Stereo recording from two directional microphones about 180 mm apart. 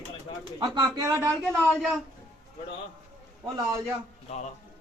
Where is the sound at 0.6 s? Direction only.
20° right (ahead or behind).